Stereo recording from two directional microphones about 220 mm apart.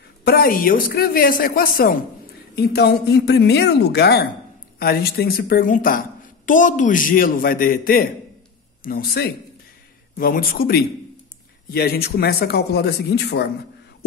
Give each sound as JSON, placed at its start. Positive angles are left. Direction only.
{"t": 0.2, "sound": "a woman's voice", "side_deg": 45}